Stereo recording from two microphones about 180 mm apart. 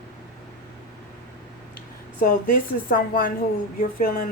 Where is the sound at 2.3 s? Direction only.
50° left (ahead or behind).